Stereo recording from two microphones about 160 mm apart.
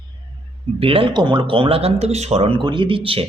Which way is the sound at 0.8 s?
35° right (ahead or behind).